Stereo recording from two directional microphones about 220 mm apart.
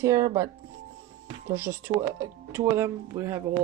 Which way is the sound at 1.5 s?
10° right (ahead or behind).